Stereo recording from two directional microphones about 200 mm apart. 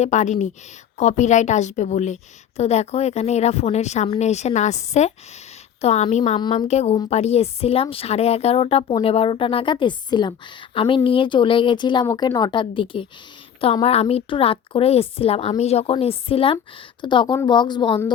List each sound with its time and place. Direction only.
0.0 s a woman's voice: 35° left (ahead or behind)
6.4 s speech: 20° left (ahead or behind)